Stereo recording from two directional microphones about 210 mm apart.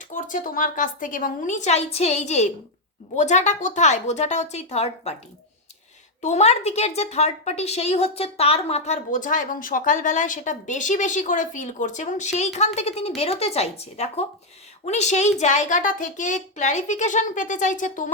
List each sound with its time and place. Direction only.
0.1 s a woman's voice: 35° left (ahead or behind)
6.2 s a woman's voice: 30° left (ahead or behind)